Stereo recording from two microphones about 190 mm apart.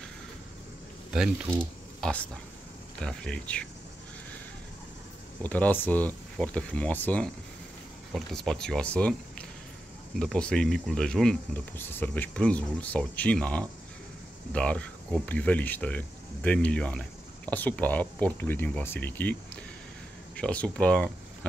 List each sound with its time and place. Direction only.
1.1 s speech: 5° right (ahead or behind)
5.4 s speech: 10° left (ahead or behind)
10.1 s speech: 5° left (ahead or behind)